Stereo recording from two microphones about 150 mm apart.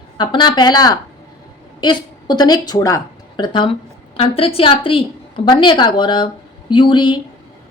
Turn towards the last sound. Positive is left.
turn(degrees=35)  # may be behind; listen again after turning